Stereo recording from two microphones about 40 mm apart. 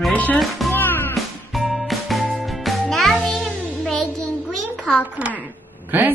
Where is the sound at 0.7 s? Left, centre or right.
Left.